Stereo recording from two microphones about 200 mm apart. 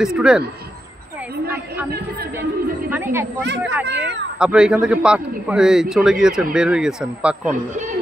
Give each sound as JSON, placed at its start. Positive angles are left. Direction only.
{"t": 0.0, "sound": "a man's voice", "side_deg": -5}
{"t": 2.9, "sound": "speech", "side_deg": -10}
{"t": 3.8, "sound": "speech", "side_deg": -60}
{"t": 4.4, "sound": "a man's voice", "side_deg": -5}
{"t": 7.5, "sound": "a man's voice", "side_deg": -40}